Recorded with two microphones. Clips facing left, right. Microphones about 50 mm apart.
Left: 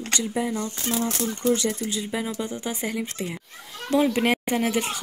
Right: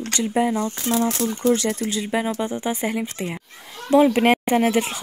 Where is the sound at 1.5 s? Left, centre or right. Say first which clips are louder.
Right 1 dB; right.